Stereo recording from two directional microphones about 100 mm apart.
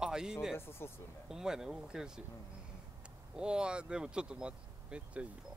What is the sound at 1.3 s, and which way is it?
Speech, 5° right (ahead or behind).